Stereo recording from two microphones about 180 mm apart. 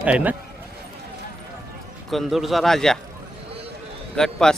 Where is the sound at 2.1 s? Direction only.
Centre (ahead or behind).